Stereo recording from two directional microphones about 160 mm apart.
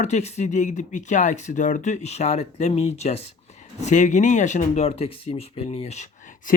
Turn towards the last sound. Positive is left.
turn(degrees=50)  # may be behind; listen again after turning